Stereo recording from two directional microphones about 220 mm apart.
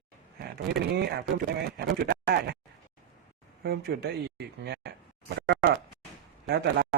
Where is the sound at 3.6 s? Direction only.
45° right (ahead or behind).